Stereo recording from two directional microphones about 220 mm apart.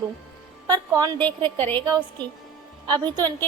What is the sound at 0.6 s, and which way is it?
Speech, 20° right (ahead or behind).